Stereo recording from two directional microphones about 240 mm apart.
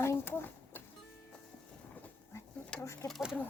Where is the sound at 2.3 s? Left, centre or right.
Centre.